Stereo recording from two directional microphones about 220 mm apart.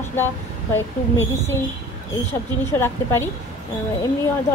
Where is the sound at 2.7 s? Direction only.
10° left (ahead or behind).